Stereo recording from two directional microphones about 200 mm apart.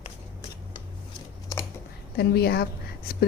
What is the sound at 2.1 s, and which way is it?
Speech, 50° left (ahead or behind).